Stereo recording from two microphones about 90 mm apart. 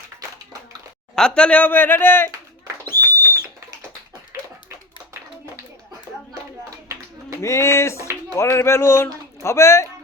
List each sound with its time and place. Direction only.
1.1 s speech: 10° left (ahead or behind); by 2.3 s 25° left (ahead or behind)
2.8 s a sound: 25° left (ahead or behind)
7.4 s speech: 30° left (ahead or behind)